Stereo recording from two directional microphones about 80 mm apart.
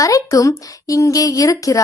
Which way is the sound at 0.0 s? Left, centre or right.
Left.